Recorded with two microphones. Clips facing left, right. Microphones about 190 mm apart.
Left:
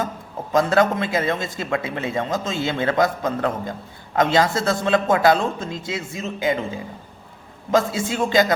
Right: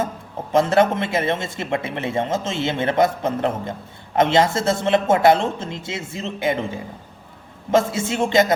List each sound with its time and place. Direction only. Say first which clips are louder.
0.5 s a man's voice: right 1 dB; 25° right (ahead or behind)
7.7 s a man's voice: right 1 dB; 25° right (ahead or behind)